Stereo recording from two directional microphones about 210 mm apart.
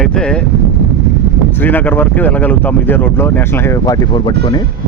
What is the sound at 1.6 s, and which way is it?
Speech, 10° left (ahead or behind).